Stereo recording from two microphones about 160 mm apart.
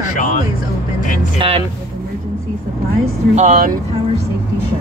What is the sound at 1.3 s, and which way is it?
Speech, 35° right (ahead or behind).